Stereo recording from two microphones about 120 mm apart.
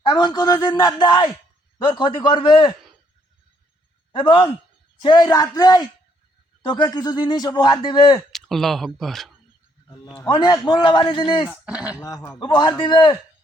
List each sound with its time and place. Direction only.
0.0 s a man's voice: 40° left (ahead or behind)
4.1 s a man's voice: 40° left (ahead or behind)
8.3 s speech: centre (ahead or behind)
10.2 s a man's voice: 40° left (ahead or behind)
11.4 s speech: 10° right (ahead or behind)
11.9 s speech: 25° left (ahead or behind)
12.4 s a man's voice: 40° left (ahead or behind)